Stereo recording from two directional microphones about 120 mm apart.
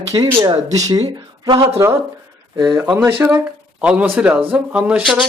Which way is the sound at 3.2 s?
20° right (ahead or behind).